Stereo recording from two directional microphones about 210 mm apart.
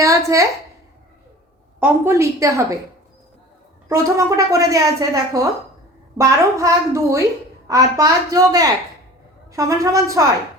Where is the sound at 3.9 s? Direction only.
15° right (ahead or behind).